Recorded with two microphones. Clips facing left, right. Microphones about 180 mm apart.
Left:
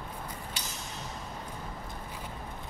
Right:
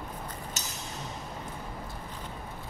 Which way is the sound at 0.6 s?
45° right (ahead or behind).